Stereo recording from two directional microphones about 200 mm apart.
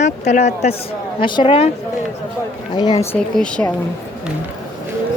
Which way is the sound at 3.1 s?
5° left (ahead or behind).